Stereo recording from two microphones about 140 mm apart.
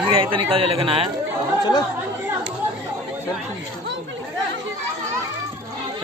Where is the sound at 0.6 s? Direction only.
45° right (ahead or behind).